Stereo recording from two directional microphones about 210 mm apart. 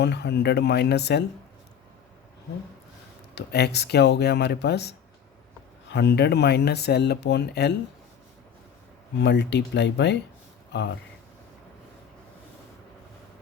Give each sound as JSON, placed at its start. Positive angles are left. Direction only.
{"t": 0.0, "sound": "speech", "side_deg": 55}
{"t": 3.3, "sound": "speech", "side_deg": 50}
{"t": 9.1, "sound": "speech", "side_deg": 55}